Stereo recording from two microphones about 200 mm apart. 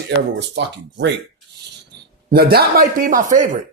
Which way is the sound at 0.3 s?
60° right (ahead or behind).